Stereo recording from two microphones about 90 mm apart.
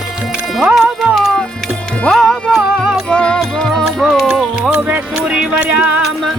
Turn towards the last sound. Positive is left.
turn(degrees=-10)  # may be behind; listen again after turning